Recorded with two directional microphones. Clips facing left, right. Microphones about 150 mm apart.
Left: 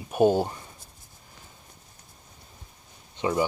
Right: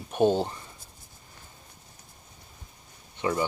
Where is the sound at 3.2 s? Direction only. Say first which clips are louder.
Left 2 dB; 20° left (ahead or behind).